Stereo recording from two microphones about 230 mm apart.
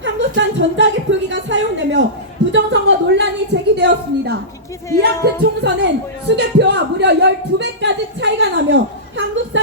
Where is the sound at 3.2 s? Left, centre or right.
Right.